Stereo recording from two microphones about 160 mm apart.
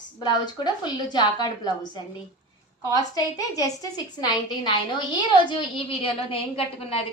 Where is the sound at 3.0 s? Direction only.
20° left (ahead or behind).